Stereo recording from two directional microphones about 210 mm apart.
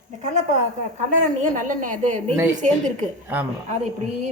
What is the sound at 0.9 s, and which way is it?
A woman's voice, 35° right (ahead or behind).